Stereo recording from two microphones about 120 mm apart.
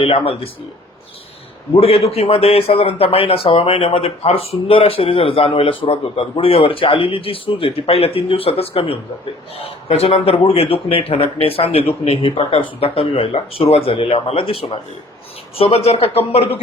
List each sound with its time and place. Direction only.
0.0 s speech: 50° left (ahead or behind)
1.7 s speech: 55° left (ahead or behind)